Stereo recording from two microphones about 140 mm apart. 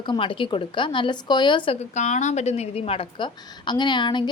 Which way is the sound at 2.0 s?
55° left (ahead or behind).